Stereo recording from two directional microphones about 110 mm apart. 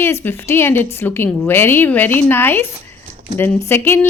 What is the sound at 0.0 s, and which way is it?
A woman's voice, 20° left (ahead or behind).